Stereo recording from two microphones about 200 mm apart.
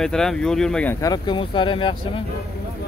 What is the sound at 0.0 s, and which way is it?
Speech, centre (ahead or behind).